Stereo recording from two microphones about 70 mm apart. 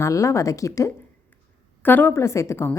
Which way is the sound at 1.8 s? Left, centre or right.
Left.